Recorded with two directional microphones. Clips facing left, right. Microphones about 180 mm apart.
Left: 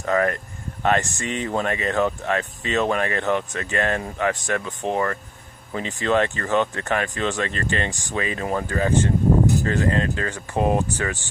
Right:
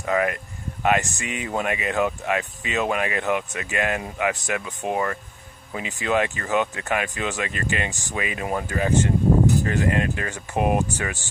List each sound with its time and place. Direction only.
0.0 s speech: 10° right (ahead or behind)